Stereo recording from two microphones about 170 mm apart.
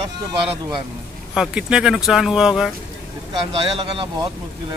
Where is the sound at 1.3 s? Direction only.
5° right (ahead or behind).